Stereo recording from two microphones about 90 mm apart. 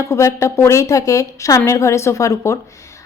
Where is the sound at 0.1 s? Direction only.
35° left (ahead or behind).